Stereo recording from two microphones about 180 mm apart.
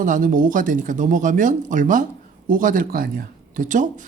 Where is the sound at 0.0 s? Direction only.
50° right (ahead or behind).